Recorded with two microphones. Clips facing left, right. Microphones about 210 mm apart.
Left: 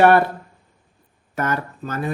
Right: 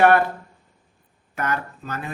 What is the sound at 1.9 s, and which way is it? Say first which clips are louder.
Speech: left 6 dB; 35° left (ahead or behind).